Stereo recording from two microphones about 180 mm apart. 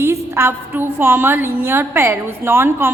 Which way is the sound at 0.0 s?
15° right (ahead or behind).